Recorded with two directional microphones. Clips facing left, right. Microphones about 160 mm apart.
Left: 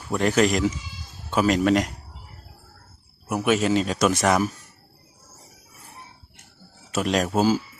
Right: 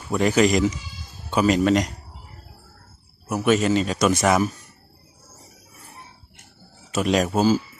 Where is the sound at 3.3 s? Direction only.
5° left (ahead or behind).